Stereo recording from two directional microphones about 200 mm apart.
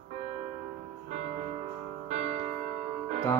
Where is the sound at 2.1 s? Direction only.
35° right (ahead or behind).